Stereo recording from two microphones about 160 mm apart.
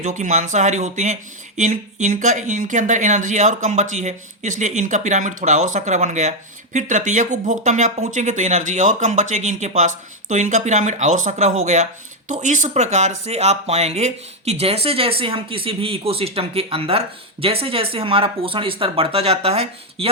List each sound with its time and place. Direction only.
0.0 s speech: 50° right (ahead or behind)